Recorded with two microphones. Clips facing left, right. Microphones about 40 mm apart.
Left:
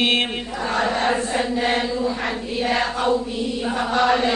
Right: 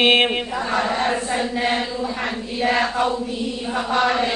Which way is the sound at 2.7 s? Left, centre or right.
Centre.